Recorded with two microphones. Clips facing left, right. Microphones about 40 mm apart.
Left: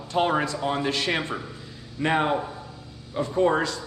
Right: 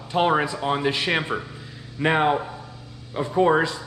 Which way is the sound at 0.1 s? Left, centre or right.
Centre.